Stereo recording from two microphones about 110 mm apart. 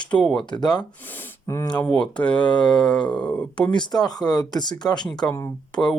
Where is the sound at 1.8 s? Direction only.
5° left (ahead or behind).